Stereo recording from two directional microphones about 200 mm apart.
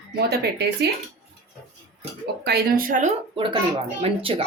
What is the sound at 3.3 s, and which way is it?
Speech, 25° right (ahead or behind).